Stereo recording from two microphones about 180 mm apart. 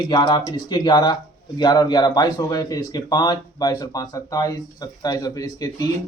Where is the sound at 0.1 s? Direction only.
20° left (ahead or behind).